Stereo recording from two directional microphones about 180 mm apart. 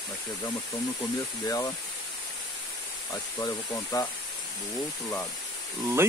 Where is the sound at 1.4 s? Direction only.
20° left (ahead or behind).